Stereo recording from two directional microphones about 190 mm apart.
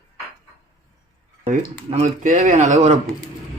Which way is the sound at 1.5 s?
40° right (ahead or behind).